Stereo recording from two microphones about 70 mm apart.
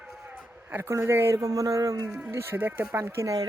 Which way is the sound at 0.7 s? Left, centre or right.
Right.